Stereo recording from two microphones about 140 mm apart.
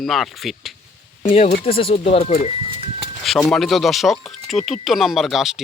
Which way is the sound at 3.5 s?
Centre (ahead or behind).